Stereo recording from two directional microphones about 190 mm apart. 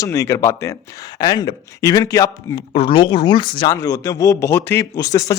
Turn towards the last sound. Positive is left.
turn(degrees=15)  # may be behind; listen again after turning